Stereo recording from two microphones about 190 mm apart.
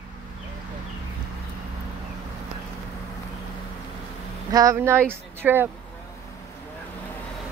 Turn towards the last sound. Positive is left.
turn(degrees=-10)  # may be behind; listen again after turning